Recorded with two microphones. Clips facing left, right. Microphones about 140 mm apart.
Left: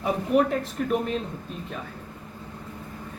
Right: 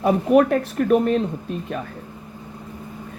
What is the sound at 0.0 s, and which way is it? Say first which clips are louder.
Speech: right 6 dB; 65° right (ahead or behind).